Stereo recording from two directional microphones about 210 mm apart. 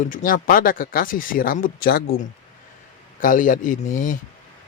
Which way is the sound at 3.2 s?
40° left (ahead or behind).